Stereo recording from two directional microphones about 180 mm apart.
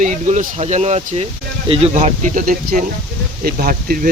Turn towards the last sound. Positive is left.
turn(degrees=-50)  # may be behind; listen again after turning